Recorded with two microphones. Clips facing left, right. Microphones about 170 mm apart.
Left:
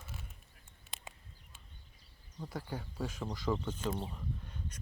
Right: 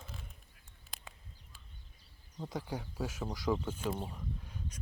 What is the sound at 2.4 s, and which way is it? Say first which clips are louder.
Speech: right 2 dB; 15° right (ahead or behind).